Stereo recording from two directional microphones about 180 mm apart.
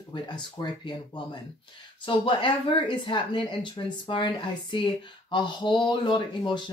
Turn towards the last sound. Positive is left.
turn(degrees=25)  # may be behind; listen again after turning